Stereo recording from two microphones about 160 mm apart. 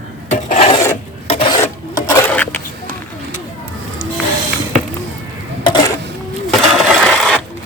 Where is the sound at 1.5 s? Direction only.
20° left (ahead or behind).